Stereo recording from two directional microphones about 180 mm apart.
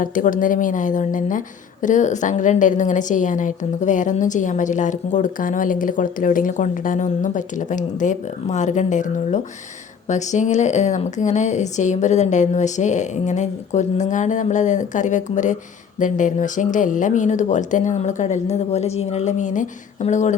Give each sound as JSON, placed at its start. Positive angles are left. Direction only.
{"t": 0.0, "sound": "a woman's voice", "side_deg": 50}